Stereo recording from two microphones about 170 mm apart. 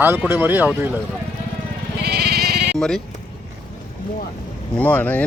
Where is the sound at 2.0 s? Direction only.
70° right (ahead or behind).